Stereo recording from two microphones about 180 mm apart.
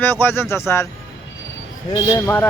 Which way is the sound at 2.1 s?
10° left (ahead or behind).